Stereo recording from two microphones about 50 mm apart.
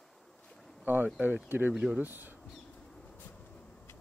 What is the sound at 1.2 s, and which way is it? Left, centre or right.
Speech, right.